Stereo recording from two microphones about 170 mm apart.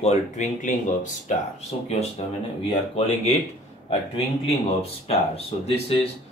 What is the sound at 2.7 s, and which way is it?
Speech, 40° left (ahead or behind).